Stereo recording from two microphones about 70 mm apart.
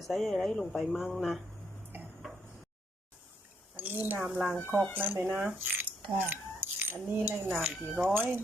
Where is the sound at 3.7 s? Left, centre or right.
Right.